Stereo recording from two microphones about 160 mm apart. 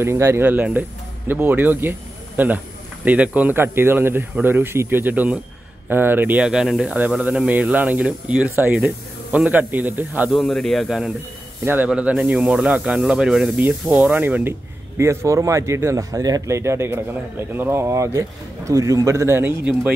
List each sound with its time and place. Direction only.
0.0 s speech: 15° right (ahead or behind)
10.3 s a man's voice: 5° left (ahead or behind)
11.6 s speech: 10° right (ahead or behind)